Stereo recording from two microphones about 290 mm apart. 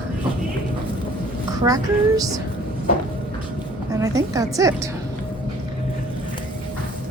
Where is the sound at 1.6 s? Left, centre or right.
Centre.